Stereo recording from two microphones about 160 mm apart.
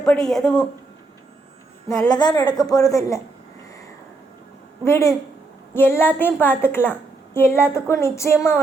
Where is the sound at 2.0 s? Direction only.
25° left (ahead or behind).